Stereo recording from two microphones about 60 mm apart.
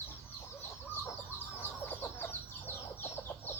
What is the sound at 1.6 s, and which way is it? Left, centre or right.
Chicken, left.